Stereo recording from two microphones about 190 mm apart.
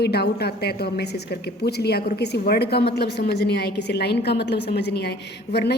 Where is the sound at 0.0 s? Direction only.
60° left (ahead or behind).